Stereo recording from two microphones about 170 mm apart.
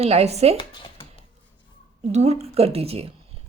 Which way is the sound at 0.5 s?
30° left (ahead or behind).